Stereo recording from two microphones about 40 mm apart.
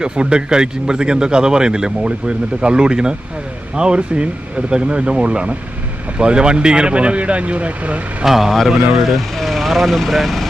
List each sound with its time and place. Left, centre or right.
0.0 s speech: right
8.2 s speech: centre